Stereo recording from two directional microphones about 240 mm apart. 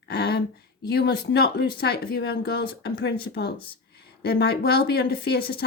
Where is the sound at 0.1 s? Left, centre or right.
Left.